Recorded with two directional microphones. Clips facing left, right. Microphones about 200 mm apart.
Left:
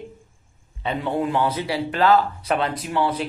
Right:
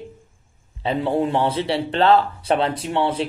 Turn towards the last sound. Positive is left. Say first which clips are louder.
# right 2 dB
turn(degrees=-30)  # may be behind; listen again after turning